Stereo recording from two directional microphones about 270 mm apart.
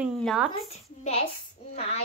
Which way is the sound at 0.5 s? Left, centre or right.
Left.